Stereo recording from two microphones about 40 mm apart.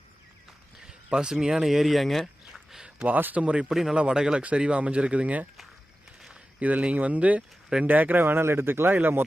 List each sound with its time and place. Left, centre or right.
0.9 s speech: right; by 2.3 s centre
3.3 s speech: right
3.7 s speech: centre
3.9 s speech: right
6.6 s speech: right
8.2 s speech: right
8.9 s speech: right